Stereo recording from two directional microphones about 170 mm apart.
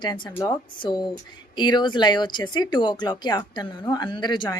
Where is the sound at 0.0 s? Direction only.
25° left (ahead or behind).